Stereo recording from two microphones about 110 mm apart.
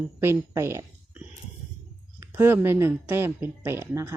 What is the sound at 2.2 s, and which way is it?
Speech, 20° right (ahead or behind).